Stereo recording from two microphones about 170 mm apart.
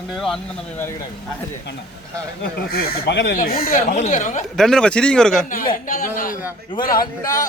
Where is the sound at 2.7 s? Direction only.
80° left.